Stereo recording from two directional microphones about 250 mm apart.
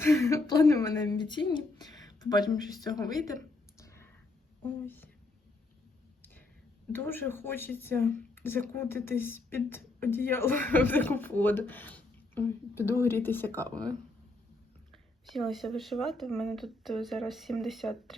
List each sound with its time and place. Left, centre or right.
0.0 s a woman's voice: centre
3.8 s clicking: centre
4.6 s speech: centre
6.9 s speech: centre
15.3 s speech: centre